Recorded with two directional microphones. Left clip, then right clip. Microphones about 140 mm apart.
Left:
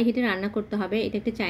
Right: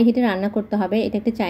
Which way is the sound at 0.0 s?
15° right (ahead or behind).